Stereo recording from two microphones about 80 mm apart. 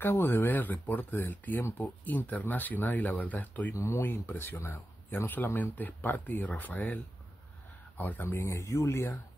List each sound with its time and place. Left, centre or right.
0.0 s speech: left
3.8 s speech: left
8.0 s speech: left
8.3 s speech: left